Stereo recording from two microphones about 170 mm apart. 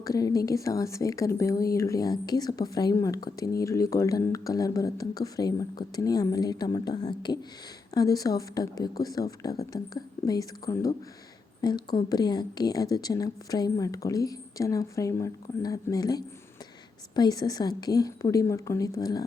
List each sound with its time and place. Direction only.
0.0 s a woman's voice: 20° left (ahead or behind)